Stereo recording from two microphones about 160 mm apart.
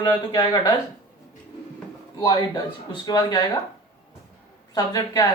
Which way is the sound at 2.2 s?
25° left (ahead or behind).